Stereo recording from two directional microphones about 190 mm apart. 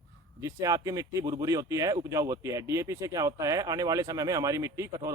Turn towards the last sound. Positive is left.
turn(degrees=-15)  # may be behind; listen again after turning